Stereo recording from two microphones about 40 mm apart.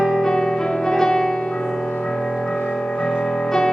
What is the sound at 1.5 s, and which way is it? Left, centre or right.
Music, centre.